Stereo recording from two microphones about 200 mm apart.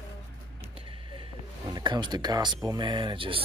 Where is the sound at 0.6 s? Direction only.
25° right (ahead or behind).